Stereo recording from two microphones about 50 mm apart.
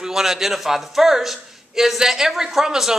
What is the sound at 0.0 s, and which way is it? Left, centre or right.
A man's voice, centre.